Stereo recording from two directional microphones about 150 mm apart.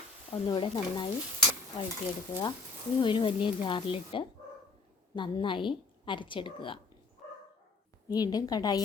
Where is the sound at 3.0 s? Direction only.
35° left (ahead or behind).